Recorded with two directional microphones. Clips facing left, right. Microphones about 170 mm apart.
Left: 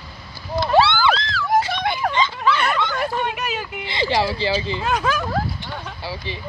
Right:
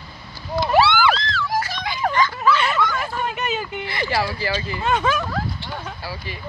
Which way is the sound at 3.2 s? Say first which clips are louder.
Right 1 dB; centre (ahead or behind).